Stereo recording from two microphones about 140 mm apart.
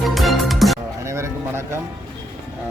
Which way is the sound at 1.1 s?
20° right (ahead or behind).